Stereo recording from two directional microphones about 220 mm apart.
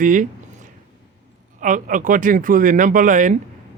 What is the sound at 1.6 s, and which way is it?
Speech, 35° right (ahead or behind).